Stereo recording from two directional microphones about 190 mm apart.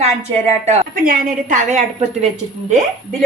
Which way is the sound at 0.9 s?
45° right (ahead or behind).